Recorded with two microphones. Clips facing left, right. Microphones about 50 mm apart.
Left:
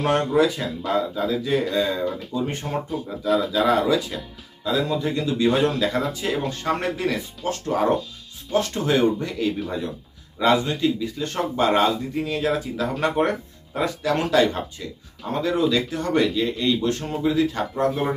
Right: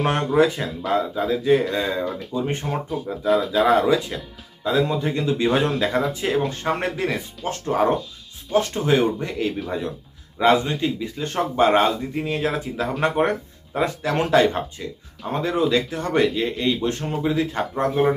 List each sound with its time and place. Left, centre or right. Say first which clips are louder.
0.0 s speech: right 1 dB; right
12.9 s speech: right 1 dB; centre
13.7 s speech: right 1 dB; right
14.8 s speech: right 2 dB; centre